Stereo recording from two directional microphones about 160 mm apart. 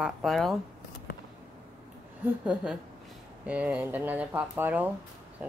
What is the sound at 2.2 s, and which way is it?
A woman's voice, 5° right (ahead or behind).